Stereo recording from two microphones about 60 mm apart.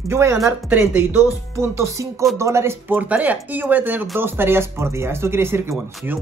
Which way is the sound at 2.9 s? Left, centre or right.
Right.